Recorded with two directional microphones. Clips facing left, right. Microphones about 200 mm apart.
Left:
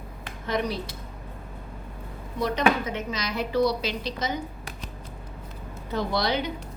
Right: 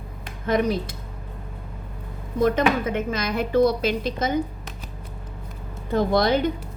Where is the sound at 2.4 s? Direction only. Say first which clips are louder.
Right 4 dB; 50° right (ahead or behind).